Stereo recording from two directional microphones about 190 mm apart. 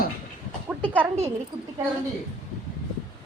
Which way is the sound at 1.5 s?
20° right (ahead or behind).